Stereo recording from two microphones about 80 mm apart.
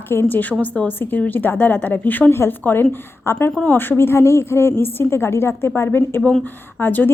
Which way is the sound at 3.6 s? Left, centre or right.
Left.